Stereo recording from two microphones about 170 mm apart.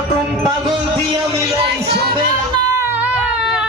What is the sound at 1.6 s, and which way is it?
Music, 70° right (ahead or behind).